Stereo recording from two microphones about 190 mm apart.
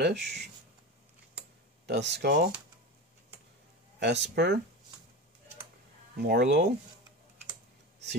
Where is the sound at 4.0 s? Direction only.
60° right (ahead or behind).